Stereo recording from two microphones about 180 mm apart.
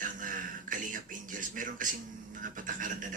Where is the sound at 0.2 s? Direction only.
50° right (ahead or behind).